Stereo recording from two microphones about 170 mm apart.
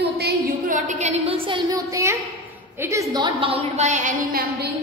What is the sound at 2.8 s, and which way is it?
A woman's voice, 20° right (ahead or behind).